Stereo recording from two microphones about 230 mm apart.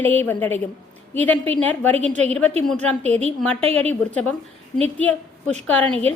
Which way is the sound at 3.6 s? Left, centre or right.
Right.